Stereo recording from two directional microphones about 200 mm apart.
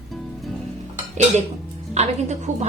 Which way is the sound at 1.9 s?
35° right (ahead or behind).